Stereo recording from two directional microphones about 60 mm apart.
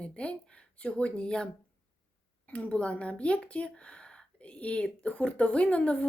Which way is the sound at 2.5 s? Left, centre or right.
Centre.